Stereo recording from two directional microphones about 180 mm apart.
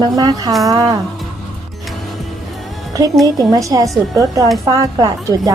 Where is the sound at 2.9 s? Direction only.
20° right (ahead or behind).